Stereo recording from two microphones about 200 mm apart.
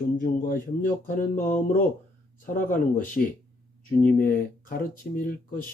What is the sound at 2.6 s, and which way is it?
Speech, 40° left (ahead or behind).